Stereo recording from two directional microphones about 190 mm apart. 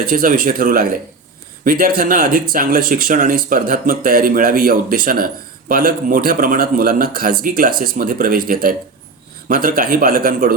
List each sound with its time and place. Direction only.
0.0 s speech: 45° right (ahead or behind)